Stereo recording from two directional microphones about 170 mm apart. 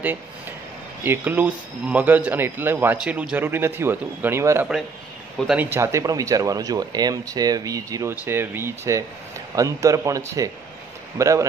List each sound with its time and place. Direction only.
0.0 s speech: 10° right (ahead or behind)